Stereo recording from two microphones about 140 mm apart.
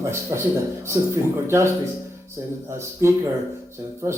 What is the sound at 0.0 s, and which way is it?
Speech, 20° right (ahead or behind).